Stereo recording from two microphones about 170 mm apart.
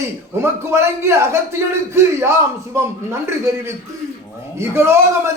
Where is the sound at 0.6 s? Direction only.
15° right (ahead or behind).